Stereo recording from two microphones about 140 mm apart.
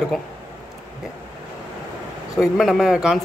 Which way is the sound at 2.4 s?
Centre (ahead or behind).